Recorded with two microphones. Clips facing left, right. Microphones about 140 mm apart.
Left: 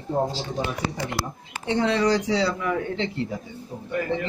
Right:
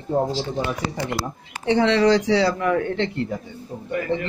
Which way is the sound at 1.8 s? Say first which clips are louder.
Right 4 dB; 75° right (ahead or behind).